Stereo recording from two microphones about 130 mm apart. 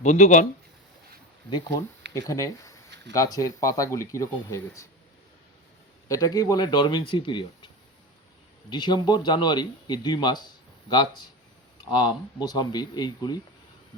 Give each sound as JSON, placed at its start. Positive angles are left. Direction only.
{"t": 0.0, "sound": "a man's voice", "side_deg": 70}
{"t": 1.5, "sound": "speech", "side_deg": 35}
{"t": 2.1, "sound": "speech", "side_deg": 25}
{"t": 6.1, "sound": "speech", "side_deg": 30}
{"t": 8.7, "sound": "speech", "side_deg": 35}